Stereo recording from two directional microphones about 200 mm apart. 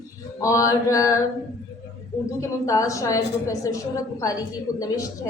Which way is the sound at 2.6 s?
15° left (ahead or behind).